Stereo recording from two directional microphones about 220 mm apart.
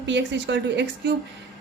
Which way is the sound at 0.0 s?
55° right (ahead or behind).